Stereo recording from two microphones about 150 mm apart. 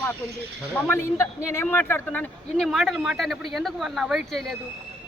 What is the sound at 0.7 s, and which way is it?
Speech, 10° left (ahead or behind).